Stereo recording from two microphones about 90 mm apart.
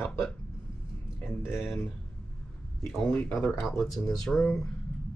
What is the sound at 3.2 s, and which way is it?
Speech, 10° left (ahead or behind).